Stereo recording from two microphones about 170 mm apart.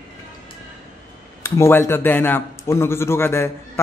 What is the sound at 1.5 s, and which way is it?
A man's voice, 15° left (ahead or behind).